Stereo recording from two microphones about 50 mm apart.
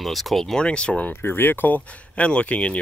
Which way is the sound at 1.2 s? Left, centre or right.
Left.